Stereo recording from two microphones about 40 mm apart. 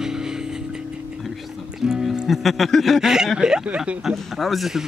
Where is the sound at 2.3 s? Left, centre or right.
Centre.